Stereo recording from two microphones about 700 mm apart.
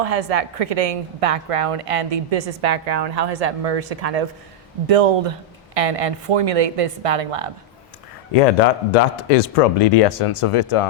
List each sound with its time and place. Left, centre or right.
0.0 s a woman's voice: right
8.3 s speech: left